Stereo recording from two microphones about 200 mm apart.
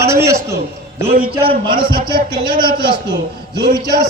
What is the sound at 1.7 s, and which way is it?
Speech, 45° right (ahead or behind).